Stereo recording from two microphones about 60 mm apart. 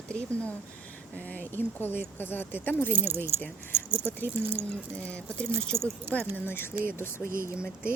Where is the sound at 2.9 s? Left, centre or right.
Right.